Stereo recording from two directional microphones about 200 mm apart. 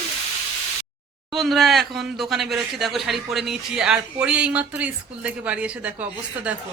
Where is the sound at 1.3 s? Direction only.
Centre (ahead or behind).